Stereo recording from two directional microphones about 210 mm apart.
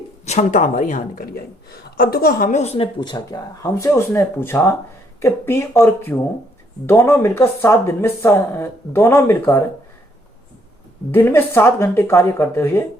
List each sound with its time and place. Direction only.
0.3 s a woman's voice: 35° left (ahead or behind); by 9.6 s 10° left (ahead or behind)
11.1 s speech: 10° left (ahead or behind)